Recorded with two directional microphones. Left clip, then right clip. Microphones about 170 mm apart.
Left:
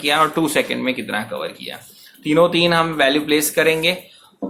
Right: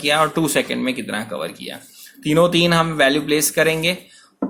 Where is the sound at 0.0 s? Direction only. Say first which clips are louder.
Left 1 dB; 30° right (ahead or behind).